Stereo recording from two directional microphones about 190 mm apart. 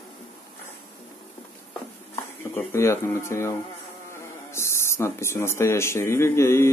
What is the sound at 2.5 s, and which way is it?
Speech, 15° left (ahead or behind).